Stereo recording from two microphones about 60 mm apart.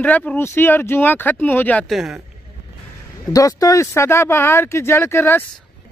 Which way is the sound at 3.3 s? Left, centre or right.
Left.